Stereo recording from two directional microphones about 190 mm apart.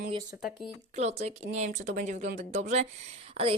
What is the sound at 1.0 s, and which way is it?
Speech, 35° right (ahead or behind).